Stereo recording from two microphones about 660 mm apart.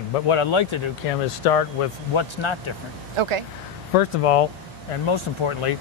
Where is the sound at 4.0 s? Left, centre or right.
Left.